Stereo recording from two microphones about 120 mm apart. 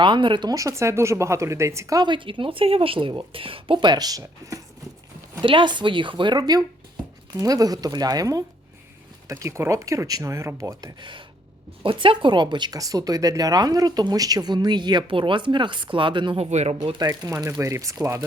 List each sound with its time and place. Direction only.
0.0 s speech: 40° right (ahead or behind)
2.0 s a woman's voice: 40° right (ahead or behind); by 4.6 s 25° right (ahead or behind)
5.3 s speech: 45° right (ahead or behind)
11.8 s speech: 45° right (ahead or behind)
16.4 s speech: 65° right (ahead or behind)
16.9 s speech: 35° right (ahead or behind)